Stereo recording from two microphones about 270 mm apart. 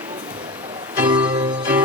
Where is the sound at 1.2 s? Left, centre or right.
Centre.